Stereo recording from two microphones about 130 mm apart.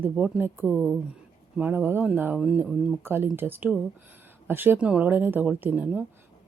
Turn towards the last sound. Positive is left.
turn(degrees=-10)  # may be behind; listen again after turning